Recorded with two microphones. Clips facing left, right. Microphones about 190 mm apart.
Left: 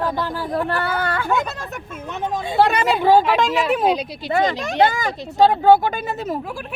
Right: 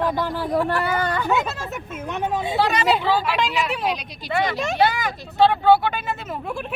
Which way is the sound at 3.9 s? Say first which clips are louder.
Left 6 dB; 30° left (ahead or behind).